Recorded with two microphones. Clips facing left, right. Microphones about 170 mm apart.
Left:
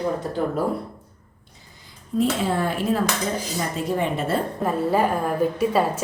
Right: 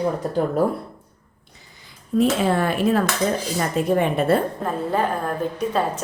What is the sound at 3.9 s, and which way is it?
Speech, 55° right (ahead or behind).